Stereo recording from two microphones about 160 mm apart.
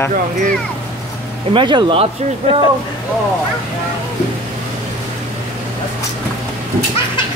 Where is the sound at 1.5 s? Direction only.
30° right (ahead or behind).